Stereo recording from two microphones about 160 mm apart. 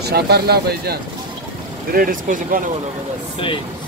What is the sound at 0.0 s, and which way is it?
Speech, 90° right.